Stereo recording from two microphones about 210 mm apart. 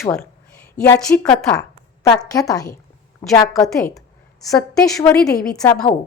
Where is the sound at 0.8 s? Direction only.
5° left (ahead or behind).